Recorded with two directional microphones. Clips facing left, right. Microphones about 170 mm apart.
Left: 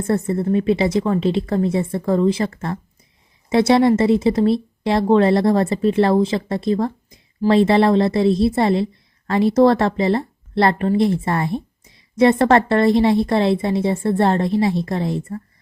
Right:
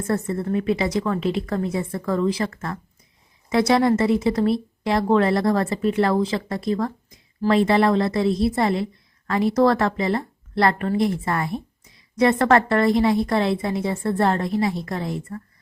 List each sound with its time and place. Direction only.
0.1 s a woman's voice: 25° left (ahead or behind)